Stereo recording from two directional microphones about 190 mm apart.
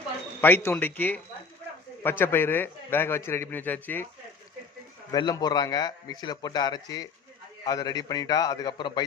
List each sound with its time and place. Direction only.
0.4 s a man's voice: 10° left (ahead or behind)
5.1 s a man's voice: 20° left (ahead or behind)